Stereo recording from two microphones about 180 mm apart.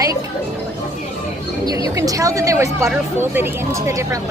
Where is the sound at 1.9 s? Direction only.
20° right (ahead or behind).